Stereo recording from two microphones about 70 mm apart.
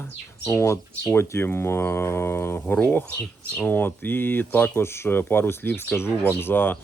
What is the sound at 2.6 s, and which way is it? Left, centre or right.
Speech, left.